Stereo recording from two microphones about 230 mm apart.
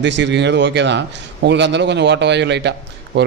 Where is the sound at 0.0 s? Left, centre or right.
Right.